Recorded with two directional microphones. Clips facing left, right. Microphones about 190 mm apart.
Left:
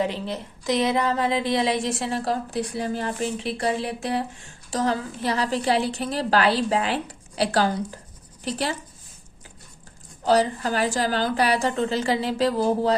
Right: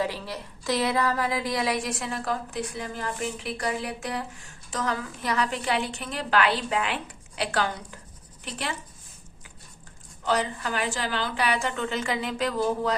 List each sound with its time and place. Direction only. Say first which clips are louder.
0.0 s a woman's voice: left 4 dB; 20° left (ahead or behind)
10.2 s a woman's voice: left 6 dB; 35° left (ahead or behind)